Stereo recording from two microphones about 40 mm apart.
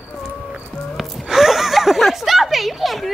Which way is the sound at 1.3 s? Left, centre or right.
Centre.